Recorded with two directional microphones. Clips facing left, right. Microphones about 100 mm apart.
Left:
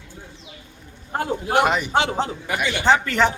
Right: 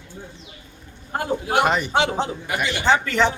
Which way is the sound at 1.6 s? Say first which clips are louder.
Even; 5° left (ahead or behind).